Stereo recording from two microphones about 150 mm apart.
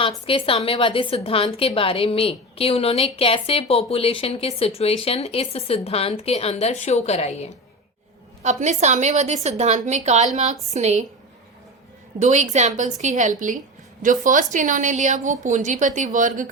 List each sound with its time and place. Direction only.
0.0 s a woman's voice: 35° left (ahead or behind)
8.4 s a woman's voice: 50° right (ahead or behind)
12.2 s a woman's voice: 55° right (ahead or behind)